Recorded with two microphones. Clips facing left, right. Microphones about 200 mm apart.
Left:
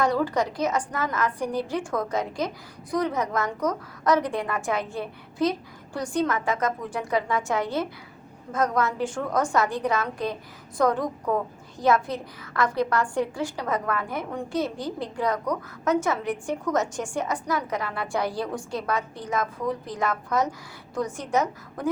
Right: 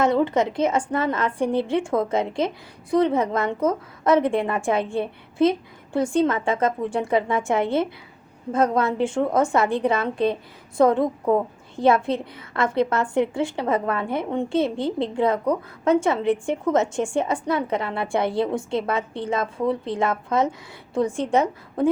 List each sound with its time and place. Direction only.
0.0 s a woman's voice: 25° right (ahead or behind)